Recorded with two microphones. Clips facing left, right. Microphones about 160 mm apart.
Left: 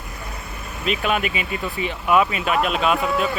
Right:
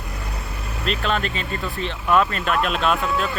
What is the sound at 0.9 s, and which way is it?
Speech, 10° left (ahead or behind).